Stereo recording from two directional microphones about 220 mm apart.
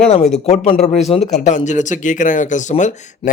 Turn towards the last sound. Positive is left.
turn(degrees=35)  # may be behind; listen again after turning